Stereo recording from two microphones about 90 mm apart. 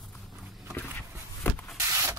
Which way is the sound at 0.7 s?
20° left (ahead or behind).